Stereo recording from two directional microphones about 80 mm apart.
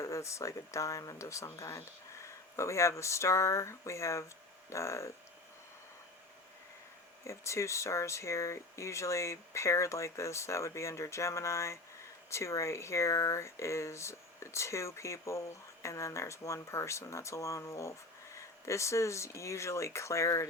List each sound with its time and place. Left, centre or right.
0.0 s speech: left
7.3 s speech: left